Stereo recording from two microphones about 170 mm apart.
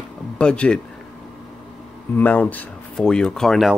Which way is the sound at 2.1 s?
10° left (ahead or behind).